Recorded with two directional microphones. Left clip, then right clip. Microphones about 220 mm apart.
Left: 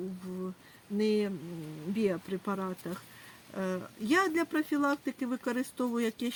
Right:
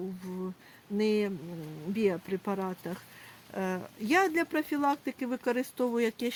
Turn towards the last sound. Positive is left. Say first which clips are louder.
# right 3 dB
turn(degrees=-35)  # may be behind; listen again after turning